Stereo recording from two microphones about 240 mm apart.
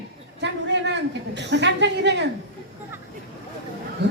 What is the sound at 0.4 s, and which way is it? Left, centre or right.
A man's voice, right.